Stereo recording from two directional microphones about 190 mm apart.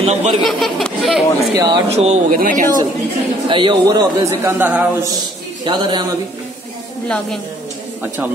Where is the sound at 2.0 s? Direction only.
35° right (ahead or behind).